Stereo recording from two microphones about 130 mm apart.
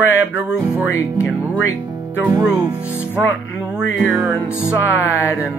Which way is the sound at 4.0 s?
Centre (ahead or behind).